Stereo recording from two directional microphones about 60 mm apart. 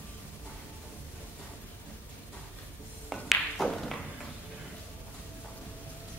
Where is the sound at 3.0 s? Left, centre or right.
Centre.